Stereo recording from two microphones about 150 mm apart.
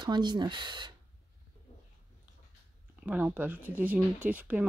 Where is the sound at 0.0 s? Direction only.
30° right (ahead or behind).